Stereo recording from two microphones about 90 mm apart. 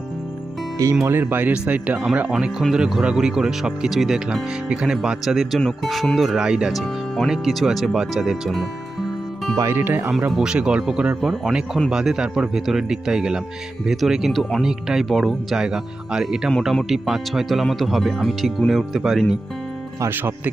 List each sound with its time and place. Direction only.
1.0 s speech: 25° right (ahead or behind); by 8.6 s centre (ahead or behind)
9.6 s speech: 30° right (ahead or behind)
10.1 s speech: 5° right (ahead or behind)
20.0 s speech: 25° right (ahead or behind)